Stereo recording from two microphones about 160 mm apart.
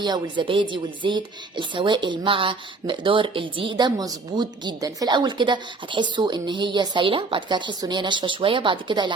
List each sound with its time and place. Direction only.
0.0 s speech: 30° right (ahead or behind)